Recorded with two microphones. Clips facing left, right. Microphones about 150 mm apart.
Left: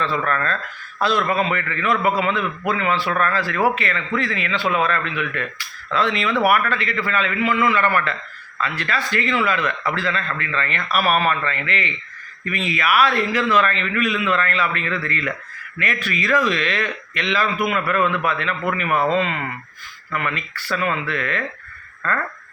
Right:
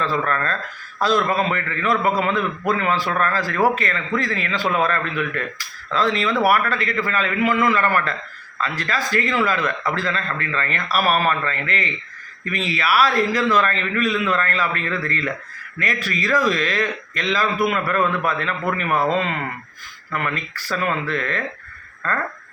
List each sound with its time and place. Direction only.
0.0 s a man's voice: 35° right (ahead or behind)